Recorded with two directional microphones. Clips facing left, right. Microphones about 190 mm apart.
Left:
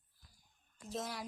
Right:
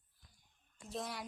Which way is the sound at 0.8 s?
Centre (ahead or behind).